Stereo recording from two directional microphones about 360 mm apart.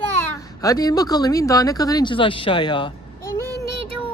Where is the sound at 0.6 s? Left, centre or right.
Centre.